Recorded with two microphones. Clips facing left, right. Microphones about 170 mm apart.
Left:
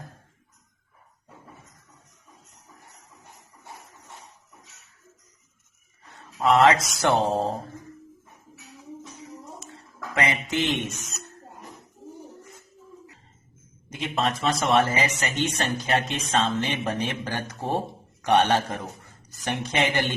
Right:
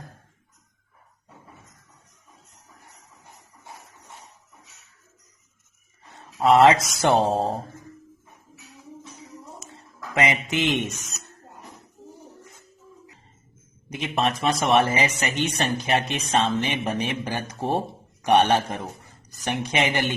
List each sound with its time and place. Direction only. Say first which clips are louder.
6.1 s speech: right 3 dB; 20° right (ahead or behind)
9.7 s a sound: right 3 dB; 15° right (ahead or behind)
10.5 s a man's voice: right 2 dB; 15° right (ahead or behind)
13.9 s a man's voice: right 2 dB; 15° right (ahead or behind)